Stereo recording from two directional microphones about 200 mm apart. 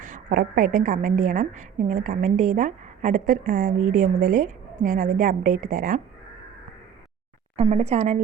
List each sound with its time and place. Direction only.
0.0 s a woman's voice: 40° right (ahead or behind)
7.5 s a woman's voice: 30° right (ahead or behind)